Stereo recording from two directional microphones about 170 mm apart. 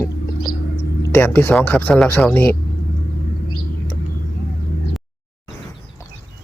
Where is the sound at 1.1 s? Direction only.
10° left (ahead or behind).